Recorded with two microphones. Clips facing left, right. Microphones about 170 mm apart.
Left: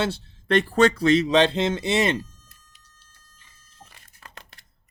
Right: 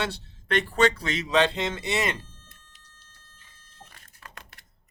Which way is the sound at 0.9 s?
35° left (ahead or behind).